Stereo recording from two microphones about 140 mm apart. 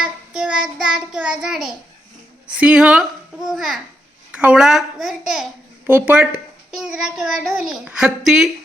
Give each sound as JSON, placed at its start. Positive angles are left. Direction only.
{"t": 0.0, "sound": "child singing", "side_deg": -5}
{"t": 2.5, "sound": "a child's voice", "side_deg": -5}